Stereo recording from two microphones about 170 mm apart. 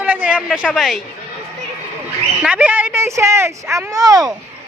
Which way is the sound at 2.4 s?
10° right (ahead or behind).